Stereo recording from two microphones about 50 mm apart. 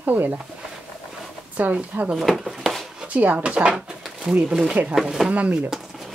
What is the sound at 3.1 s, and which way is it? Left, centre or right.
Speech, right.